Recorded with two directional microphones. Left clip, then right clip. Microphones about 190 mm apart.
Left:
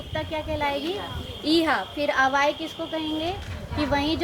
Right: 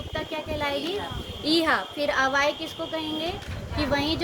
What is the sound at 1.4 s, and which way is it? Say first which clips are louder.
A woman's voice: left 1 dB; 25° right (ahead or behind).